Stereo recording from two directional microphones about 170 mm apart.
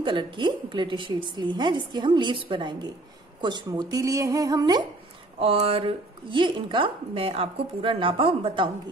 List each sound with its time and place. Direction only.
0.0 s a woman's voice: 30° right (ahead or behind)
5.4 s a woman's voice: 35° right (ahead or behind)